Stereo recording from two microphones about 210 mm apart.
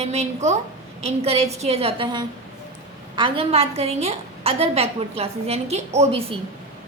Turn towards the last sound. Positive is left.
turn(degrees=-30)  # may be behind; listen again after turning